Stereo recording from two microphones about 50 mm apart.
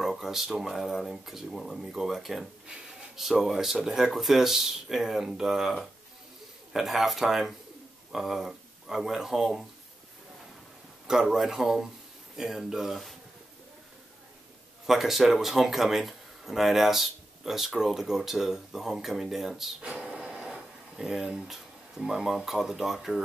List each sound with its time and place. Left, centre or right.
0.0 s speech: centre
2.7 s a sound: centre
3.3 s speech: centre
11.1 s speech: centre
14.9 s speech: centre